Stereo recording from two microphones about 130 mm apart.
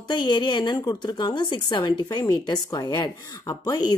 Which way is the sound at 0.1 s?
35° left (ahead or behind).